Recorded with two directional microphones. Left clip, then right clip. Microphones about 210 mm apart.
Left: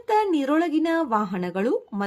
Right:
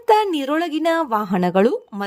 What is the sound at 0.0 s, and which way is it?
A woman's voice, 45° right (ahead or behind).